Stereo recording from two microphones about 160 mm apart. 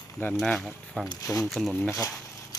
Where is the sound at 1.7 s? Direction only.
15° left (ahead or behind).